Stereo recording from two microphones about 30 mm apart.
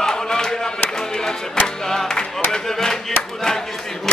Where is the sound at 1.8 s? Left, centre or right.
Centre.